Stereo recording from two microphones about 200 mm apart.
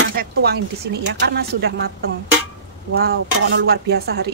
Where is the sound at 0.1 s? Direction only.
50° right (ahead or behind).